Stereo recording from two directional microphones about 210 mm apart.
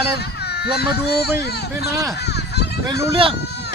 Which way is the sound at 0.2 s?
50° left (ahead or behind).